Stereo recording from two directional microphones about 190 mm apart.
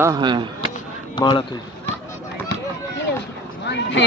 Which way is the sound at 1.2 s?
25° left (ahead or behind).